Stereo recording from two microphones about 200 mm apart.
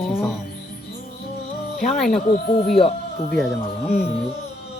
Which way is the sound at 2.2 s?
40° left (ahead or behind).